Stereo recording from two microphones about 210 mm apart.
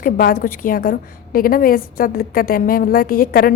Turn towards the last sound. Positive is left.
turn(degrees=45)  # may be behind; listen again after turning